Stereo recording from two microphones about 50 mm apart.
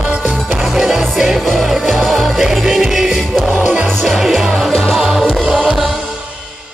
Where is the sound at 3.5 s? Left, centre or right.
Right.